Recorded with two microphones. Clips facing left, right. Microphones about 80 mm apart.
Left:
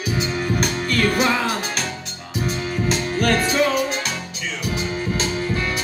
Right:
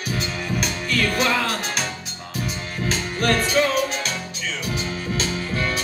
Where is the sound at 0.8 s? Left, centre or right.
Left.